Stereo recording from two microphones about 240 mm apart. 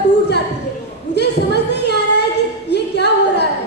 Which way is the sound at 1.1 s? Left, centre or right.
Left.